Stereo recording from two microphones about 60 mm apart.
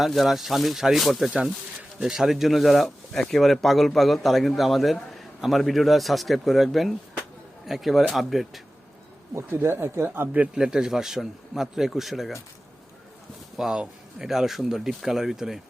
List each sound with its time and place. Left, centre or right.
0.0 s speech: centre
9.5 s speech: right
10.5 s speech: centre
13.6 s speech: centre